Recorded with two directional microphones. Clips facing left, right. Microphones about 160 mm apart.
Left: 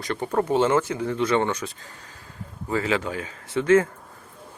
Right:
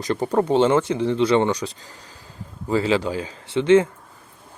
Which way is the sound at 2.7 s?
25° right (ahead or behind).